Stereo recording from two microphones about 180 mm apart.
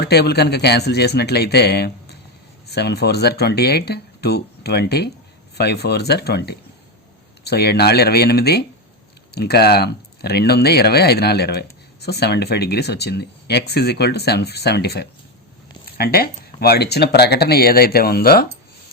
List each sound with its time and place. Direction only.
0.0 s speech: 65° left (ahead or behind)